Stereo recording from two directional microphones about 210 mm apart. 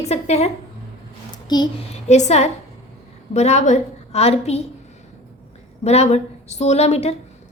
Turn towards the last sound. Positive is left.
turn(degrees=30)  # may be behind; listen again after turning